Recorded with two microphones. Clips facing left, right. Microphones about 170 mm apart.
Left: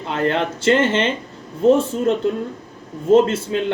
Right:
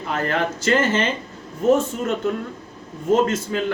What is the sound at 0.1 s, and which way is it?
Speech, 25° left (ahead or behind).